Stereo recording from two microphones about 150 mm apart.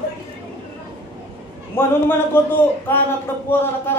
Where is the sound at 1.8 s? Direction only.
15° left (ahead or behind).